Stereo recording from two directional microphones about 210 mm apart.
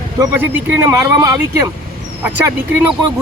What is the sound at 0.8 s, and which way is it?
Speech, 15° right (ahead or behind).